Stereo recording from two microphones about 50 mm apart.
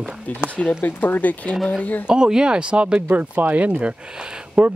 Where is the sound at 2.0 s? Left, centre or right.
Centre.